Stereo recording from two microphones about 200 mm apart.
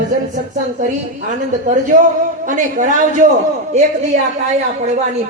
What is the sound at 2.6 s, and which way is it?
Speech, 40° right (ahead or behind).